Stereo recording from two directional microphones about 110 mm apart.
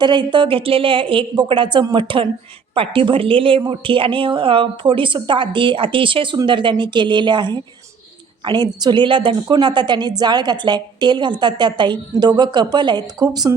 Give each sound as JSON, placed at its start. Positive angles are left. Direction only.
{"t": 0.0, "sound": "a woman's voice", "side_deg": -45}